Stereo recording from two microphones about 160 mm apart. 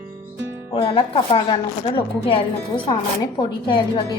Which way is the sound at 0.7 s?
35° left (ahead or behind).